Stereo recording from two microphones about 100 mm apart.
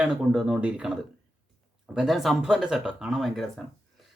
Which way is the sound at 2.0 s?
Centre (ahead or behind).